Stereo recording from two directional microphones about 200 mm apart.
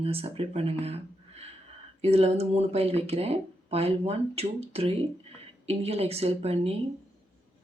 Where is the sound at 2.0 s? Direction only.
30° right (ahead or behind).